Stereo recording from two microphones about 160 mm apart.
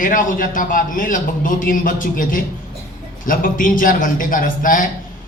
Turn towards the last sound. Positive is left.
turn(degrees=60)  # may be behind; listen again after turning